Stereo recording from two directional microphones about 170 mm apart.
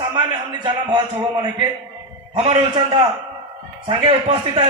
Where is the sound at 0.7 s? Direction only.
30° right (ahead or behind).